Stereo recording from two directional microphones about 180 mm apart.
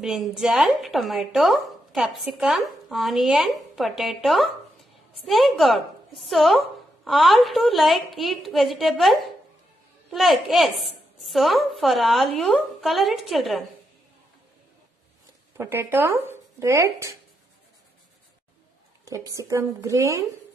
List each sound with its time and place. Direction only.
0.0 s speech: 5° right (ahead or behind)
15.5 s speech: 15° right (ahead or behind)
19.0 s speech: 15° right (ahead or behind)